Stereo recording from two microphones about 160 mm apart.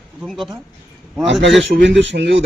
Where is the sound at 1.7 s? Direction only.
60° right (ahead or behind).